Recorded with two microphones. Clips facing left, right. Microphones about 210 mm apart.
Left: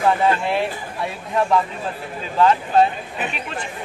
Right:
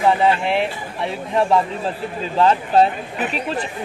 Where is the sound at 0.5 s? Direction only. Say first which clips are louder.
Right 1 dB; 25° right (ahead or behind).